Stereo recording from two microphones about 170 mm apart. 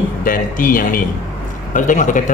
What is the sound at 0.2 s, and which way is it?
Speech, 55° left (ahead or behind).